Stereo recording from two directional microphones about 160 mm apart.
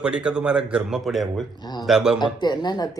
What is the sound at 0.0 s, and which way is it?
A man's voice, 5° right (ahead or behind).